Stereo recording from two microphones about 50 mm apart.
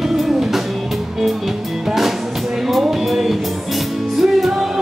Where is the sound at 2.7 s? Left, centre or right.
Centre.